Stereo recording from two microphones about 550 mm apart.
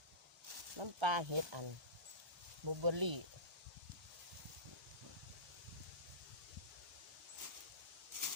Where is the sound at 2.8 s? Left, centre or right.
Right.